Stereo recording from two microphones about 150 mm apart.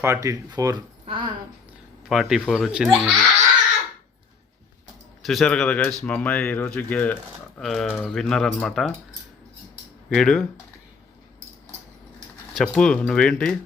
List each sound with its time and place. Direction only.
0.0 s speech: 20° right (ahead or behind)
2.0 s speech: centre (ahead or behind)
5.2 s speech: centre (ahead or behind)
10.2 s speech: 5° left (ahead or behind)
12.5 s speech: 5° left (ahead or behind)